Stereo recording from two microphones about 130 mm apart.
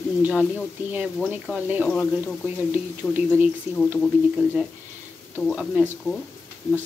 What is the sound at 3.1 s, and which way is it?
Speech, 15° right (ahead or behind).